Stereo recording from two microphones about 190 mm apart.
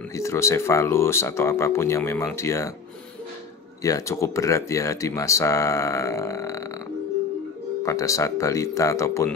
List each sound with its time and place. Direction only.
0.1 s speech: 15° left (ahead or behind)
3.8 s speech: 15° left (ahead or behind)
7.8 s speech: 15° left (ahead or behind)